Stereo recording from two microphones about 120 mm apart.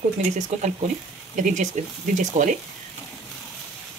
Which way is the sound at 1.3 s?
90° right.